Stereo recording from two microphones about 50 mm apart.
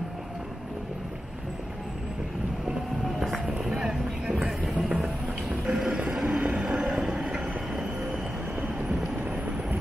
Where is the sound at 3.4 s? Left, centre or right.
Centre.